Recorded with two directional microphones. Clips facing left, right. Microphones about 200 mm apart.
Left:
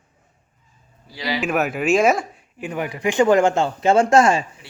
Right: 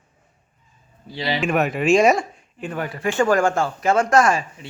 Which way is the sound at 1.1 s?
25° right (ahead or behind).